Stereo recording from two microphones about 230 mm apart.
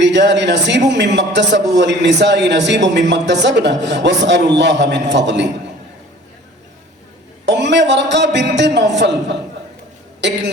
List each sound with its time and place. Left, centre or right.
0.0 s speech: right
7.4 s a man's voice: right